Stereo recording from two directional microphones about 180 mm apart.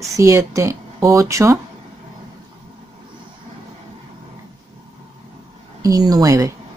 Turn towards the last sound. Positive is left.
turn(degrees=-20)  # may be behind; listen again after turning